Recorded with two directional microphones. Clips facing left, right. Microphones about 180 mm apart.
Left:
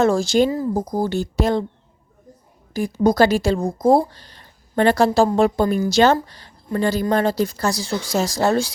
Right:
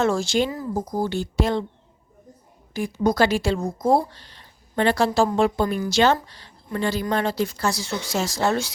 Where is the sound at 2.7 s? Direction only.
40° left (ahead or behind).